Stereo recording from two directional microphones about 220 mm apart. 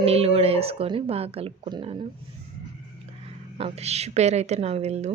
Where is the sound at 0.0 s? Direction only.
25° right (ahead or behind).